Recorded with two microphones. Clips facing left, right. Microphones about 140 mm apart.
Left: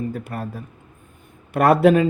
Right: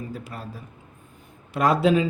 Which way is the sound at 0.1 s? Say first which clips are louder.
Left 6 dB; 55° left (ahead or behind).